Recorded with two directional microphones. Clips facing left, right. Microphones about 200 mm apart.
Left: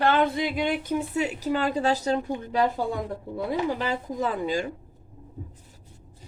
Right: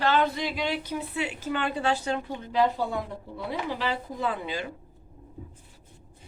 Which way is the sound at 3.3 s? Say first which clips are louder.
Left 5 dB; 45° left (ahead or behind).